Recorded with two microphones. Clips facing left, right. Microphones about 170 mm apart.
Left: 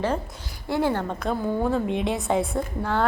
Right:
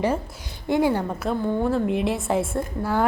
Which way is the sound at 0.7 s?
10° right (ahead or behind).